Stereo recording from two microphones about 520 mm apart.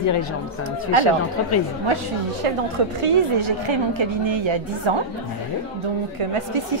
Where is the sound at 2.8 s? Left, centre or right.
Right.